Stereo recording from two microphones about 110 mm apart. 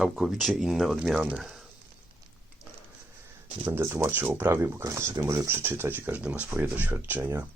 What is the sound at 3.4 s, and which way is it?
Speech, 20° right (ahead or behind).